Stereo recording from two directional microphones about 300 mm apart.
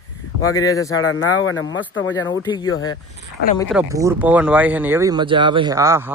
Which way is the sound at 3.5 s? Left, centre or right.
Centre.